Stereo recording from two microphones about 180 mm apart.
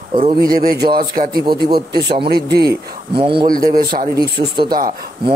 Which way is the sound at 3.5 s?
55° right (ahead or behind).